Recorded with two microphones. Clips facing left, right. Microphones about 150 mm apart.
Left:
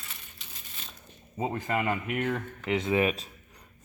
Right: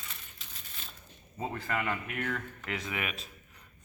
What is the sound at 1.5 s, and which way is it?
Speech, 20° left (ahead or behind).